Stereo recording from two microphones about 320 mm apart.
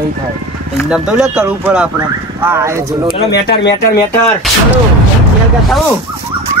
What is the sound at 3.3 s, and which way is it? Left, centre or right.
Speech, left.